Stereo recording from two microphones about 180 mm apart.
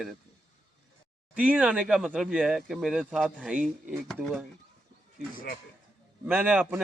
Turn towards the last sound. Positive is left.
turn(degrees=-10)  # may be behind; listen again after turning